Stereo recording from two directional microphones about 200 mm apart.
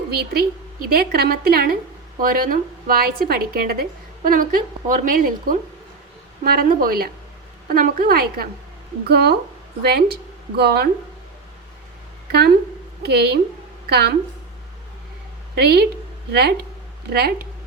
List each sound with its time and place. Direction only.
0.1 s a woman's voice: 50° right (ahead or behind)
12.3 s a woman's voice: 55° right (ahead or behind)
15.5 s a woman's voice: 55° right (ahead or behind)